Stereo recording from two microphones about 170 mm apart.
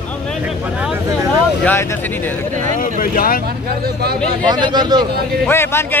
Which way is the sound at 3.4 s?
65° right (ahead or behind).